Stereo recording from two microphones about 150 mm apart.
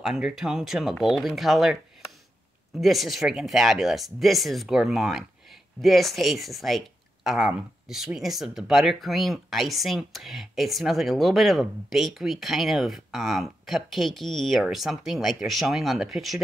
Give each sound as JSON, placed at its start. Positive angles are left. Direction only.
{"t": 0.0, "sound": "speech", "side_deg": -5}